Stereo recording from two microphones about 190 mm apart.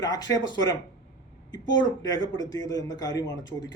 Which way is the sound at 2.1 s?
20° left (ahead or behind).